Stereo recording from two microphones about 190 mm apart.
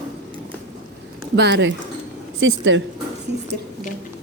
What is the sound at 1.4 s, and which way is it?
Speech, 65° right (ahead or behind).